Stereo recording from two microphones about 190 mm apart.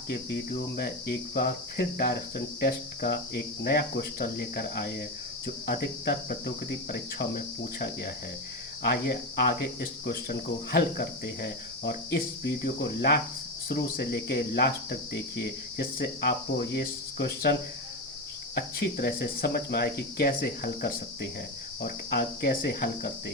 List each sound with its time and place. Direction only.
0.1 s cricket: 55° left (ahead or behind)